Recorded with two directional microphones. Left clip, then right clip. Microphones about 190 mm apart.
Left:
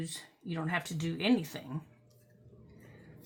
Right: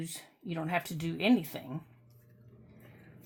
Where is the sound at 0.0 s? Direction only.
40° right (ahead or behind).